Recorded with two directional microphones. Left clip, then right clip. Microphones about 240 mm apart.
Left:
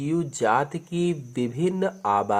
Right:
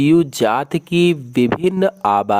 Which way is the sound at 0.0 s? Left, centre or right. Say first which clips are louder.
Right 10 dB; right.